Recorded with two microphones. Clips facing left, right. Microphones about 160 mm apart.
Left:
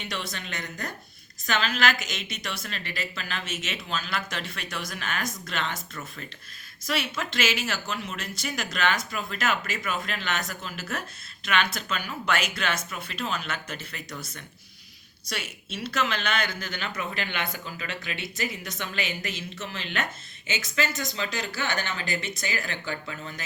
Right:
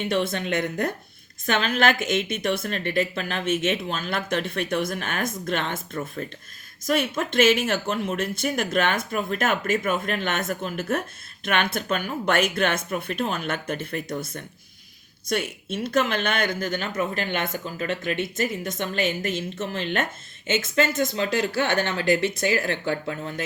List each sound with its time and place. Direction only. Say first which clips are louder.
0.0 s a woman's voice: right 11 dB; 50° right (ahead or behind)